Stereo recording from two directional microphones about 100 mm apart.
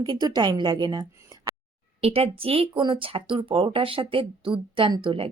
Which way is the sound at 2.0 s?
75° right (ahead or behind).